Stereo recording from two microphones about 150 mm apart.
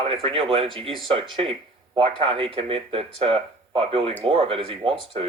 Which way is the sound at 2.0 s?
35° right (ahead or behind).